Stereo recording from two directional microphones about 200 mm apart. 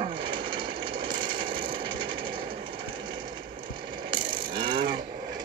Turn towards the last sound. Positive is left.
turn(degrees=-25)  # may be behind; listen again after turning